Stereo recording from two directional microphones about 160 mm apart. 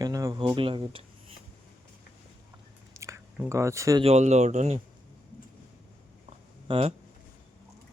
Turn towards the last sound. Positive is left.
turn(degrees=-30)  # may be behind; listen again after turning